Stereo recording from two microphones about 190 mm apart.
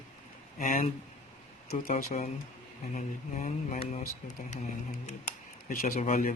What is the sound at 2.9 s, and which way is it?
Speech, 40° left (ahead or behind).